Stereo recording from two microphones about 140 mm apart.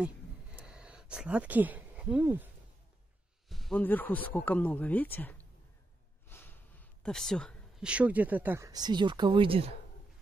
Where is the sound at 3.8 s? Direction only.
15° left (ahead or behind).